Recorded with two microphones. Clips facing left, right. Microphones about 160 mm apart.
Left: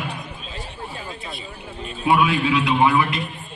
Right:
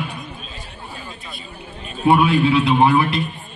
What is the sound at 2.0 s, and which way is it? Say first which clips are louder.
A man's voice: right 4 dB; 35° right (ahead or behind).